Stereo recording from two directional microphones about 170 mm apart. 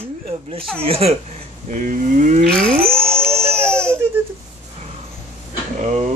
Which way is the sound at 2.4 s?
5° left (ahead or behind).